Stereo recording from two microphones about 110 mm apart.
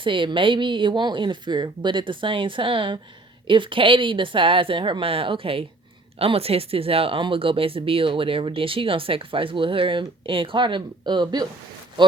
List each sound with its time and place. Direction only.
0.0 s speech: 50° right (ahead or behind)